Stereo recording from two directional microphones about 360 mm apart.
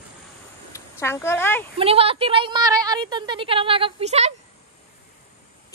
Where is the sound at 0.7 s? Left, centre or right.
Centre.